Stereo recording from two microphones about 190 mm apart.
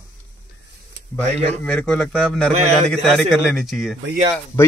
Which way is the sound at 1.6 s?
5° left (ahead or behind).